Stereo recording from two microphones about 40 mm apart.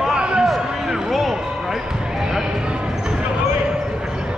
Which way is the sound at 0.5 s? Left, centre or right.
Centre.